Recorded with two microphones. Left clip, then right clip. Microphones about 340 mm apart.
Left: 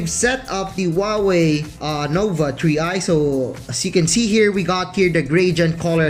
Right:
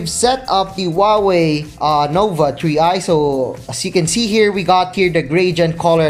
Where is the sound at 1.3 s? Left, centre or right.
Centre.